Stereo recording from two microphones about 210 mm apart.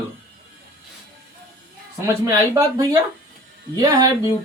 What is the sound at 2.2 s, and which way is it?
Speech, 15° right (ahead or behind).